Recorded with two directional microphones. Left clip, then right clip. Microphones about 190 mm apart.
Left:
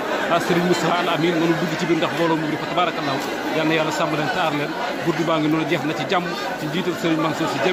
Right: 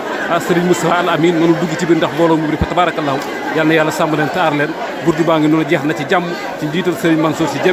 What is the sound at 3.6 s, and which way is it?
A man's voice, 15° right (ahead or behind).